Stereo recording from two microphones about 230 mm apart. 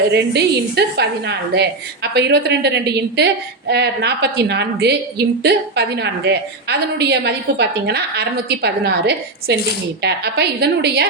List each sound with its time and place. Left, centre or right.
0.1 s a woman's voice: right